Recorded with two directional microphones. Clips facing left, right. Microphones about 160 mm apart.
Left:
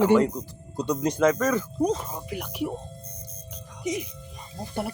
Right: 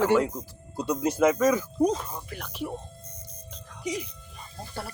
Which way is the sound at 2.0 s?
20° left (ahead or behind).